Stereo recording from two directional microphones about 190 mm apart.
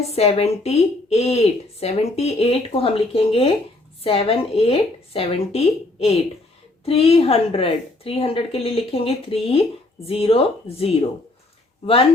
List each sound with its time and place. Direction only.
0.0 s speech: 30° left (ahead or behind)